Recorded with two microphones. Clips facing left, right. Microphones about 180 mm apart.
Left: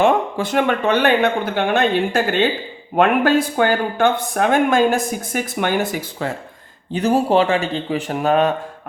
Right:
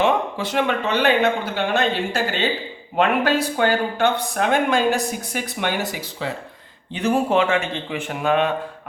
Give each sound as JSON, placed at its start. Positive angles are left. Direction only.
{"t": 0.0, "sound": "speech", "side_deg": 50}
{"t": 6.9, "sound": "a man's voice", "side_deg": 40}